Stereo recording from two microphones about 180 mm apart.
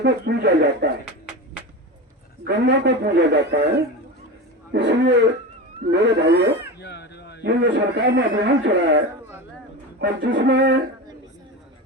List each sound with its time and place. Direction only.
0.0 s a man's voice: 70° right (ahead or behind)
2.5 s a man's voice: 70° right (ahead or behind)
6.8 s a sound: 70° left (ahead or behind)
7.4 s a man's voice: 70° right (ahead or behind)